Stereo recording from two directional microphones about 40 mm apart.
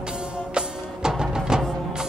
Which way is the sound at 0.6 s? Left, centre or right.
Centre.